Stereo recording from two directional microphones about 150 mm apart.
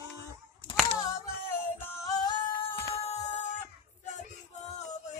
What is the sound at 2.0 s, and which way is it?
Chicken, 25° left (ahead or behind).